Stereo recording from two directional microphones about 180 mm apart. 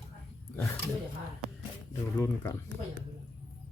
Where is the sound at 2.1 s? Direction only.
15° left (ahead or behind).